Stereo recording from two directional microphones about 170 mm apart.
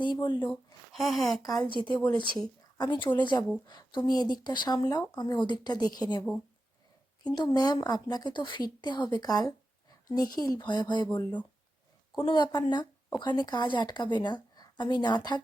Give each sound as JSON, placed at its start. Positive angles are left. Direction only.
{"t": 0.0, "sound": "speech", "side_deg": 25}
{"t": 0.5, "sound": "speech", "side_deg": 0}
{"t": 2.2, "sound": "speech", "side_deg": 25}
{"t": 7.3, "sound": "speech", "side_deg": 25}